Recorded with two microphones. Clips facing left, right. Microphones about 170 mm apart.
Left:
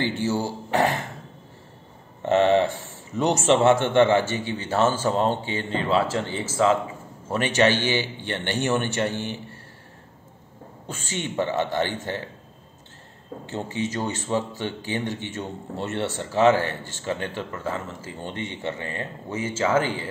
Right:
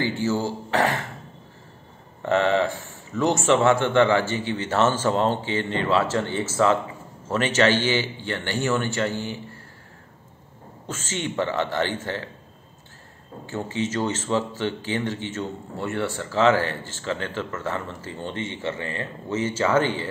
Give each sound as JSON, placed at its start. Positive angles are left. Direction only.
{"t": 0.0, "sound": "speech", "side_deg": 15}
{"t": 2.2, "sound": "a man's voice", "side_deg": 20}
{"t": 7.2, "sound": "speech", "side_deg": 15}
{"t": 10.9, "sound": "speech", "side_deg": 15}
{"t": 13.5, "sound": "speech", "side_deg": 20}